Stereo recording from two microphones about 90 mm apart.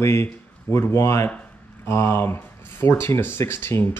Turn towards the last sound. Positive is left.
turn(degrees=25)  # may be behind; listen again after turning